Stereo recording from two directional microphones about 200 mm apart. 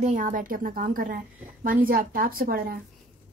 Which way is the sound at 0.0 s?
40° right (ahead or behind).